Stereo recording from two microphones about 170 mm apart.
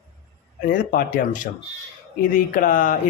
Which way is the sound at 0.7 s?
55° left (ahead or behind).